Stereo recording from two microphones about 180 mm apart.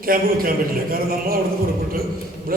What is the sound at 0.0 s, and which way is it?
A man's voice, 55° right (ahead or behind).